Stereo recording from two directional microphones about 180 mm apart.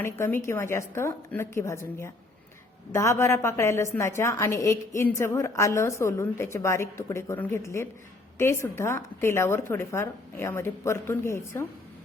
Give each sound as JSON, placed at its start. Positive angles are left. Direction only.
{"t": 0.0, "sound": "a woman's voice", "side_deg": 15}